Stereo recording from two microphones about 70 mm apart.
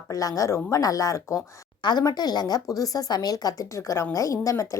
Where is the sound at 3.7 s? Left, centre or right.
Left.